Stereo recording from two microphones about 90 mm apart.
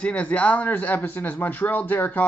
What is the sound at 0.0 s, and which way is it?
Speech, 15° left (ahead or behind).